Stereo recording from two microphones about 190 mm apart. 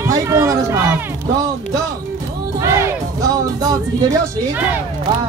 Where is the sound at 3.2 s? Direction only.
20° right (ahead or behind).